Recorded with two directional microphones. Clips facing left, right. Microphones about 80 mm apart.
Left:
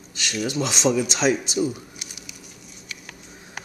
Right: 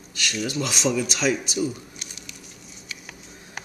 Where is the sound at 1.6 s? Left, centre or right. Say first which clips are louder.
Left 2 dB; centre.